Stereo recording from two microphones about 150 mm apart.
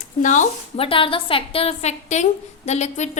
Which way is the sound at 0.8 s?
35° left (ahead or behind).